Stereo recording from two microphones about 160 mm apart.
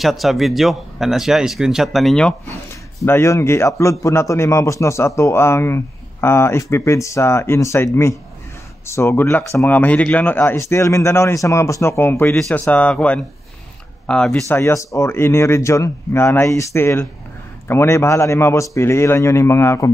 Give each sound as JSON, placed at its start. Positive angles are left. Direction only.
{"t": 0.0, "sound": "speech", "side_deg": 0}
{"t": 3.1, "sound": "speech", "side_deg": 15}
{"t": 12.4, "sound": "speech", "side_deg": 5}
{"t": 14.5, "sound": "speech", "side_deg": 20}